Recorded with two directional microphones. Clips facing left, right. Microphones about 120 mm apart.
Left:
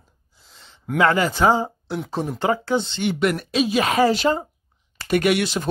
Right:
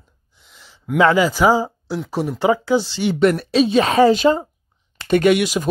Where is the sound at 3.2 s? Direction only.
35° right (ahead or behind).